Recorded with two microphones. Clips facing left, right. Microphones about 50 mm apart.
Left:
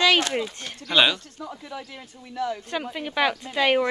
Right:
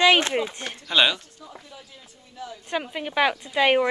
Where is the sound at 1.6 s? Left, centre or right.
Left.